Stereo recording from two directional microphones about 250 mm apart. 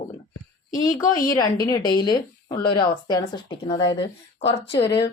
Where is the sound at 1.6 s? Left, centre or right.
Centre.